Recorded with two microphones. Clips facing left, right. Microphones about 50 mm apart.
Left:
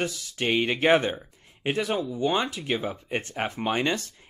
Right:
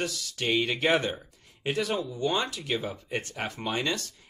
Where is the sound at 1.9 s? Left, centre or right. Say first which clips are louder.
Left 3 dB; centre.